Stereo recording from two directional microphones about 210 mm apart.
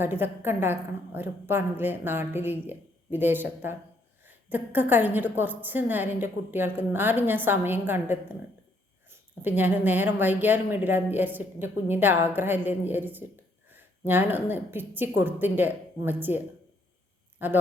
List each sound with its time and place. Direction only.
0.0 s a woman's voice: 10° right (ahead or behind)
17.4 s a woman's voice: 10° right (ahead or behind)